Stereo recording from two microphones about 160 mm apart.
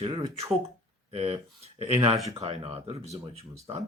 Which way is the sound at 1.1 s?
40° right (ahead or behind).